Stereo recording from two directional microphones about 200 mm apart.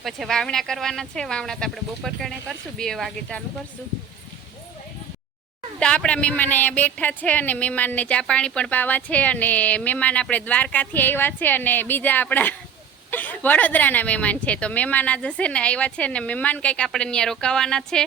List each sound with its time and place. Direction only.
0.0 s speech: centre (ahead or behind)
5.8 s speech: 5° left (ahead or behind)